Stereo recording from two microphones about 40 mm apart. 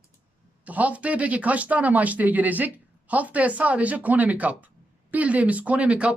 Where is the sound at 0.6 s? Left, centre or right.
Right.